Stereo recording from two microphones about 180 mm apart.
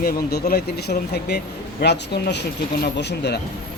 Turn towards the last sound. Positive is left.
turn(degrees=70)  # may be behind; listen again after turning